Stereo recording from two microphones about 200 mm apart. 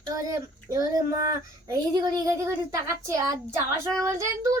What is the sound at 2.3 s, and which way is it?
Speech, 15° right (ahead or behind).